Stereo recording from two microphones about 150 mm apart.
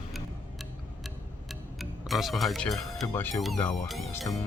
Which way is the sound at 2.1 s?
Centre (ahead or behind).